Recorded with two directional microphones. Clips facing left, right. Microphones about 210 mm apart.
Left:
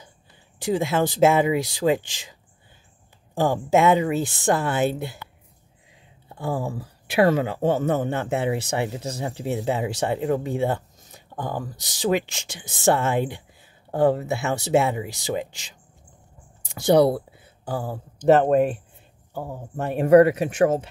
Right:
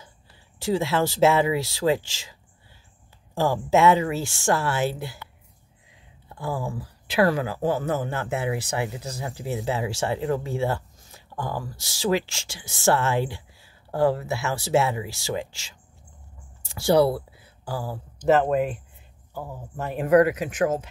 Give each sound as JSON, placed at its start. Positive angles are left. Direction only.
{"t": 0.6, "sound": "speech", "side_deg": 15}
{"t": 3.3, "sound": "speech", "side_deg": 15}
{"t": 6.2, "sound": "speech", "side_deg": 25}
{"t": 18.3, "sound": "speech", "side_deg": 45}
{"t": 19.8, "sound": "speech", "side_deg": 50}
{"t": 20.1, "sound": "speech", "side_deg": 30}